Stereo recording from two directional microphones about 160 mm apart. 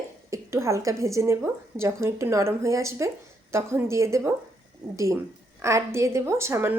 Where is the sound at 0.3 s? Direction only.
20° right (ahead or behind).